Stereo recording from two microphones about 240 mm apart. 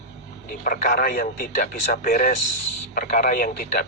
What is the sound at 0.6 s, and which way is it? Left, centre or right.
Speech, left.